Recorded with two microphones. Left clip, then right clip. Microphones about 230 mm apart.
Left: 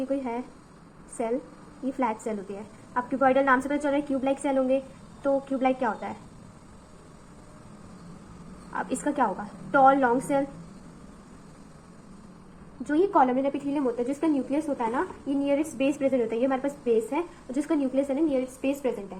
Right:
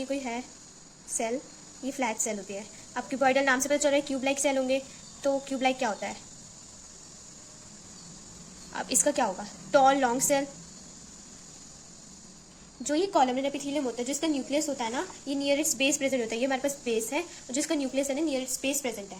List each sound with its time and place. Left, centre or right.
0.1 s a woman's voice: right
2.0 s a woman's voice: right
8.7 s a woman's voice: right
12.9 s a woman's voice: right